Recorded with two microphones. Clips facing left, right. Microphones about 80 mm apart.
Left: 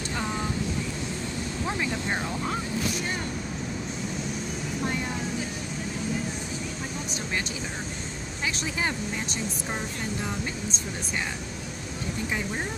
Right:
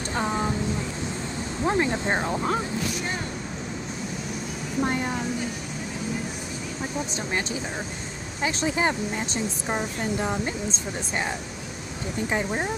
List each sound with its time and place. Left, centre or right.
0.1 s vehicle: right
1.7 s speech: right
4.8 s speech: right
8.4 s speech: right
12.3 s speech: right